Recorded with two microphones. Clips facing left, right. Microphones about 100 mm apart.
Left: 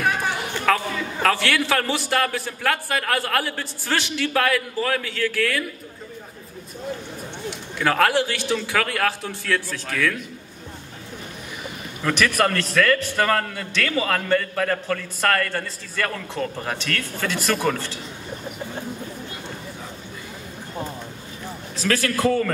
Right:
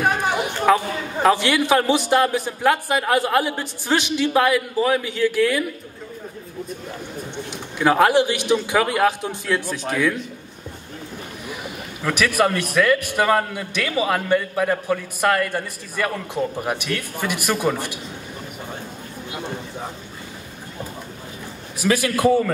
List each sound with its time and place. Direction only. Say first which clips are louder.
0.0 s a sound: right 3 dB; 20° right (ahead or behind)
1.2 s a man's voice: right 4 dB; 20° right (ahead or behind)
7.4 s a man's voice: right 4 dB; 15° right (ahead or behind)
12.0 s a man's voice: right 1 dB; 10° right (ahead or behind)
21.7 s a man's voice: right 3 dB; 15° right (ahead or behind)